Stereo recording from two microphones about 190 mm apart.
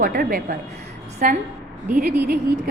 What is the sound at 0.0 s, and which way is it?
A woman's voice, 50° right (ahead or behind).